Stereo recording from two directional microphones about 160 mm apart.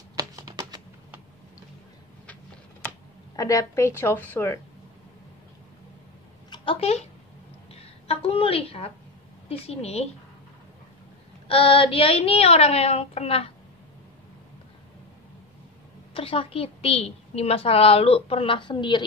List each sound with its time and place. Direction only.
0.2 s typing: 25° right (ahead or behind)
3.3 s a woman's voice: 20° left (ahead or behind)
6.5 s a woman's voice: 35° left (ahead or behind)
11.4 s a woman's voice: 35° left (ahead or behind)
16.1 s a woman's voice: 35° left (ahead or behind)